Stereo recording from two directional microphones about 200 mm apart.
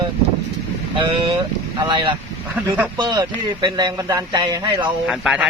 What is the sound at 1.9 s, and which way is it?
Speech, 25° right (ahead or behind).